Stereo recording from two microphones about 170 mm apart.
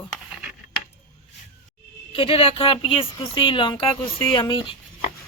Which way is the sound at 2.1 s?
35° left (ahead or behind).